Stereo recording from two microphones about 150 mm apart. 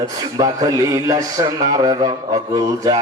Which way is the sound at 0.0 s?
25° right (ahead or behind).